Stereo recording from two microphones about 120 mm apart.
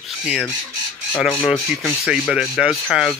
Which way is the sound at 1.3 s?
15° left (ahead or behind).